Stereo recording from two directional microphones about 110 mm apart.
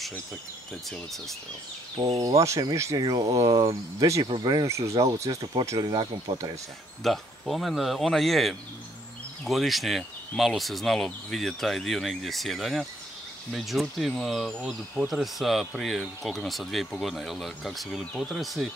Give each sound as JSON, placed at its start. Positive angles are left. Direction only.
{"t": 0.8, "sound": "speech", "side_deg": 0}
{"t": 2.1, "sound": "speech", "side_deg": -30}
{"t": 5.8, "sound": "speech", "side_deg": -45}
{"t": 7.0, "sound": "speech", "side_deg": 0}